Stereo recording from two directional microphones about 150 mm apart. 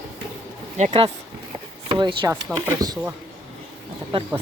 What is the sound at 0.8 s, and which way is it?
Speech, 55° right (ahead or behind).